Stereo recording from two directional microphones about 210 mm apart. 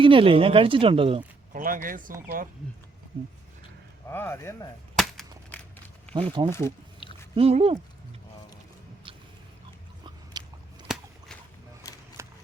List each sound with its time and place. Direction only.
0.0 s speech: 25° right (ahead or behind)
1.5 s speech: 40° right (ahead or behind)
4.1 s speech: 10° left (ahead or behind)
5.5 s walk: 10° left (ahead or behind)
6.1 s speech: 25° right (ahead or behind)
6.5 s speech: 10° left (ahead or behind)
7.0 s a sound: 25° left (ahead or behind)
7.3 s speech: 25° right (ahead or behind)
10.3 s biting: 20° right (ahead or behind)
10.9 s whip: centre (ahead or behind)
12.2 s a sound: 15° right (ahead or behind)